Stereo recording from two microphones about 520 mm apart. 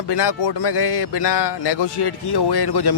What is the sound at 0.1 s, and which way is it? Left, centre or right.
Speech, left.